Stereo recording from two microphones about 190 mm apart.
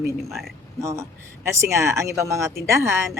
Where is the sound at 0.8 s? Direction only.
15° right (ahead or behind).